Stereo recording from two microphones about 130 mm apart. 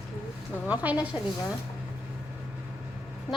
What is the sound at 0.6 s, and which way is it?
Speech, 10° right (ahead or behind).